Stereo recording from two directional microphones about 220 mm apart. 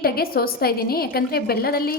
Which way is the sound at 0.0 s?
45° left (ahead or behind).